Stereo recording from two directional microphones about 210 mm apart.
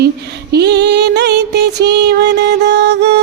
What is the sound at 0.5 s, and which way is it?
Music, 55° right (ahead or behind).